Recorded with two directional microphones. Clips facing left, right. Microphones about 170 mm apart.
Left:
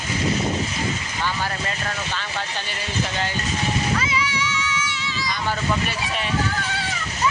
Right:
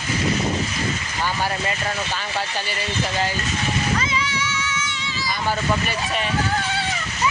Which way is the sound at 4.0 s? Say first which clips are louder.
Even; 10° left (ahead or behind).